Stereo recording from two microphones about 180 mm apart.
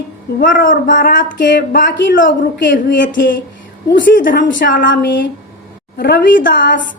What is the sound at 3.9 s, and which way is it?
A woman's voice, 50° left (ahead or behind).